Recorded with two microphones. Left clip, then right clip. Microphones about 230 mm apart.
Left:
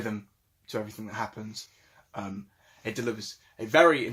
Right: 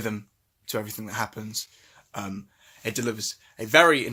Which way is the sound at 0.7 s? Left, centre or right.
Right.